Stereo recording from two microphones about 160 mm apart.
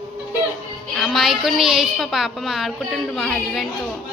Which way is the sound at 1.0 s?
Centre (ahead or behind).